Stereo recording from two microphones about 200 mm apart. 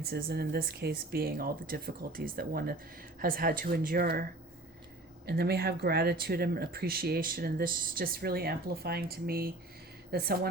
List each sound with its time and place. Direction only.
0.0 s speech: 50° right (ahead or behind)